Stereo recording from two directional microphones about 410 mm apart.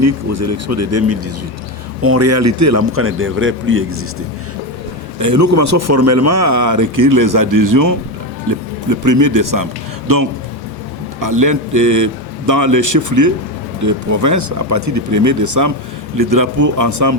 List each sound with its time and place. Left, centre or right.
0.0 s a man's voice: right
5.2 s speech: right